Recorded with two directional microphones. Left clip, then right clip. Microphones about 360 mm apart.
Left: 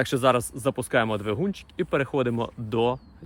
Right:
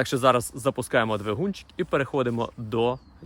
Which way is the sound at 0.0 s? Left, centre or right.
Centre.